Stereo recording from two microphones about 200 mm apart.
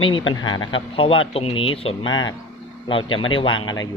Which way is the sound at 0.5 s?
80° left.